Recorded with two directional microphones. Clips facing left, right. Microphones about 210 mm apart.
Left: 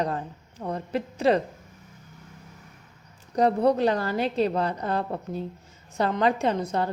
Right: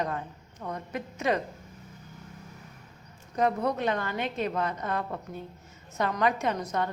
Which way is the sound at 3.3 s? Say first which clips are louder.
Left 6 dB; 35° left (ahead or behind).